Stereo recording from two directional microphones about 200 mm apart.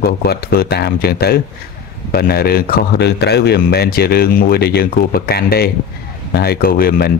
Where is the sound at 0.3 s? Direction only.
55° left (ahead or behind).